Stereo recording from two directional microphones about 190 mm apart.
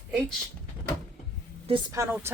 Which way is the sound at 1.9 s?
10° right (ahead or behind).